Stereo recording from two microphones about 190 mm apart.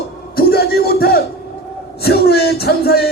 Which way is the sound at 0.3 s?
55° left (ahead or behind).